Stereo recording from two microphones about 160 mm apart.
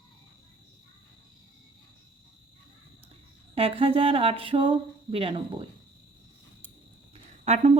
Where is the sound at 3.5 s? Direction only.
35° right (ahead or behind).